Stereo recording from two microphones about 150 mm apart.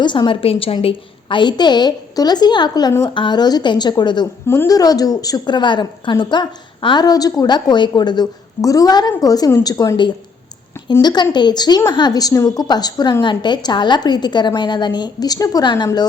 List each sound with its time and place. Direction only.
0.0 s a woman's voice: 30° left (ahead or behind)